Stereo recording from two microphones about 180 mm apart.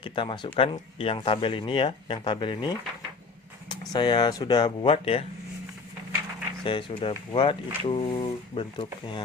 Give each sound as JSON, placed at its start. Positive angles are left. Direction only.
{"t": 0.0, "sound": "speech", "side_deg": 30}
{"t": 6.7, "sound": "speech", "side_deg": 30}